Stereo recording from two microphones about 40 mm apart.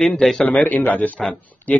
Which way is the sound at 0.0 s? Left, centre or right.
Centre.